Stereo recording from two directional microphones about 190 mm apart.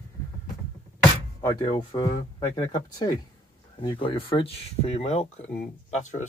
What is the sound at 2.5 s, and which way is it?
Speech, 20° left (ahead or behind).